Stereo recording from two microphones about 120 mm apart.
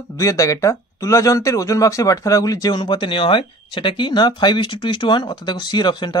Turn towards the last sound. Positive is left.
turn(degrees=40)  # may be behind; listen again after turning